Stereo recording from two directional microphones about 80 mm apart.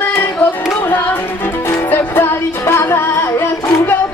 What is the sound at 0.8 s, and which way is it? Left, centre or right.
Music, left.